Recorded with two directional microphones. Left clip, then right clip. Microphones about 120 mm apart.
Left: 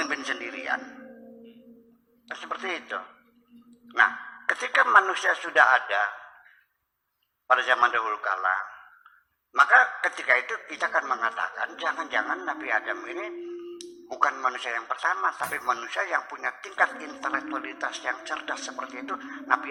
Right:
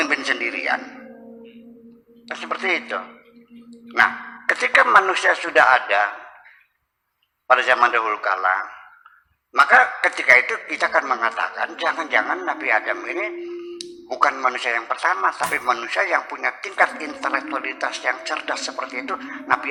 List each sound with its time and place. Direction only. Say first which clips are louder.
0.0 s a sound: right 9 dB; 20° right (ahead or behind)
2.2 s a man's voice: right 8 dB; 20° right (ahead or behind)
4.1 s dog: right 6 dB; 25° right (ahead or behind)
4.5 s a man's voice: right 5 dB; 20° right (ahead or behind)
7.4 s a man's voice: right 6 dB; 20° right (ahead or behind)
9.8 s a man's voice: right 8 dB; 20° right (ahead or behind)